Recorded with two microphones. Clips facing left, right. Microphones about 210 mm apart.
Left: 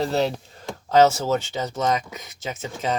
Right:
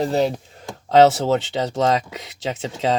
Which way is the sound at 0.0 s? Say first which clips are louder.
Right 3 dB; 15° right (ahead or behind).